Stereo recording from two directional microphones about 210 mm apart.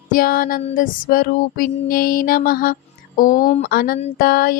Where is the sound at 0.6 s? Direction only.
40° left (ahead or behind).